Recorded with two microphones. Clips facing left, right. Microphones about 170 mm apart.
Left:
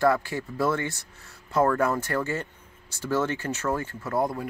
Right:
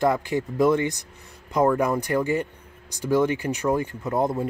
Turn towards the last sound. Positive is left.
turn(degrees=-20)  # may be behind; listen again after turning